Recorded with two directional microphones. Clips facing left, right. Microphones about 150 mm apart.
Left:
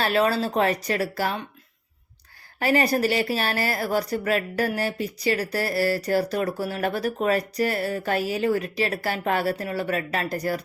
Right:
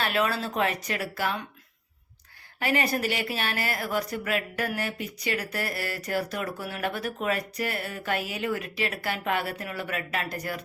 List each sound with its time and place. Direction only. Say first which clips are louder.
0.0 s speech: left 5 dB; 35° left (ahead or behind)
2.6 s speech: left 5 dB; 35° left (ahead or behind)